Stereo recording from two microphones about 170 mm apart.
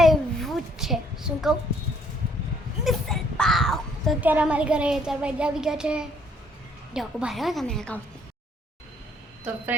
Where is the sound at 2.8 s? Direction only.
Centre (ahead or behind).